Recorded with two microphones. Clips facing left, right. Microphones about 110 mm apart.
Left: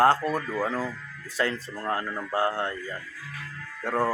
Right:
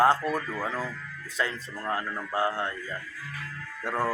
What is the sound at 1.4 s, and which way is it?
Speech, 60° left (ahead or behind).